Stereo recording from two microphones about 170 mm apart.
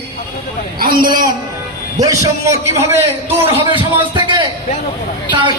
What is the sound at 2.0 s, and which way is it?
A man's voice, 20° right (ahead or behind).